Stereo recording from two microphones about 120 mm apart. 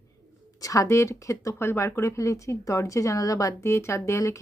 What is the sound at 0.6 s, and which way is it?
A woman's voice, 30° left (ahead or behind).